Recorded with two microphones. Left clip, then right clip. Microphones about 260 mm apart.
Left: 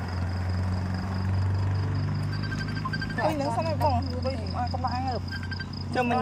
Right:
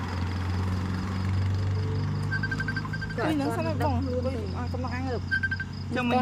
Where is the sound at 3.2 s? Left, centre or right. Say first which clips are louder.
Left 1 dB; centre.